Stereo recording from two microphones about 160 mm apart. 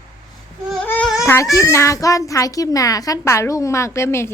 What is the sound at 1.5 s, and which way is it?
A child's voice, 20° left (ahead or behind).